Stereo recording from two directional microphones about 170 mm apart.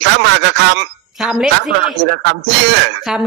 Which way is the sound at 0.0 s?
90° right.